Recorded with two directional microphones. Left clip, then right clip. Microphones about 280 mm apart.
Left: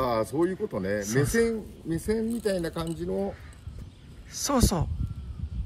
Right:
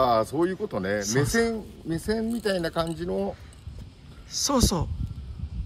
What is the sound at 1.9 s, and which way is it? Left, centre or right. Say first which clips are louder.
Speech: even; centre.